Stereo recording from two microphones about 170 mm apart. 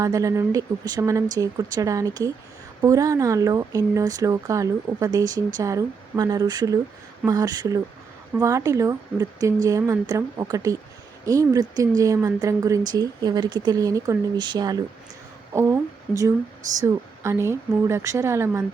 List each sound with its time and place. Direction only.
0.0 s a woman's voice: 20° right (ahead or behind)